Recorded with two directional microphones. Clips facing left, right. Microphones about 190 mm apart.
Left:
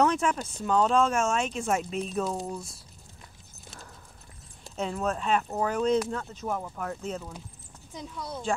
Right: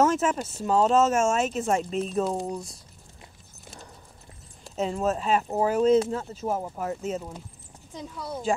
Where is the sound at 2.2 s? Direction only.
20° right (ahead or behind).